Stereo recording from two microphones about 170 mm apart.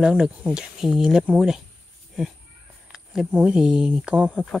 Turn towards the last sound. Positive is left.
turn(degrees=-5)  # may be behind; listen again after turning